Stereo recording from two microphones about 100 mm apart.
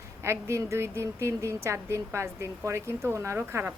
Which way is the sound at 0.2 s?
30° right (ahead or behind).